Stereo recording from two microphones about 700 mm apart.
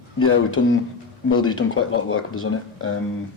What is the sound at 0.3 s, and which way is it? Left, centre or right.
Speech, centre.